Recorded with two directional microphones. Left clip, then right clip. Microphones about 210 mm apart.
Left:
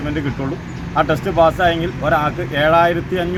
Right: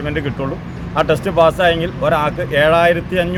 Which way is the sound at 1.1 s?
10° right (ahead or behind).